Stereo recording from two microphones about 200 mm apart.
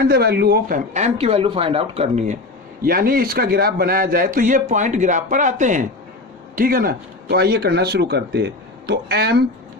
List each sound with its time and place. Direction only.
0.1 s speech: 50° right (ahead or behind); by 2.3 s 35° right (ahead or behind)
2.8 s a man's voice: 45° right (ahead or behind)